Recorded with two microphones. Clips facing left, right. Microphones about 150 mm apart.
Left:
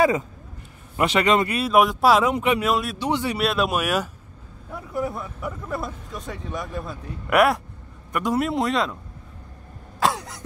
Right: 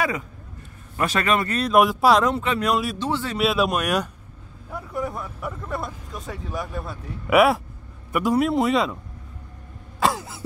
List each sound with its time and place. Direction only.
0.9 s a man's voice: 20° left (ahead or behind)
1.5 s speech: 5° left (ahead or behind)
2.3 s speech: 15° left (ahead or behind)
2.6 s speech: centre (ahead or behind)
3.0 s speech: 15° left (ahead or behind)
3.3 s speech: centre (ahead or behind)
9.9 s cough: centre (ahead or behind)